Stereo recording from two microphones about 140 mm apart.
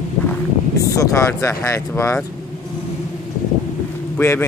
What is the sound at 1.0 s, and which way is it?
Speech, 20° left (ahead or behind).